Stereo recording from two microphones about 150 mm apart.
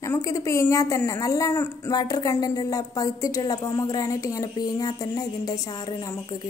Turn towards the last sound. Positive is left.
turn(degrees=25)  # may be behind; listen again after turning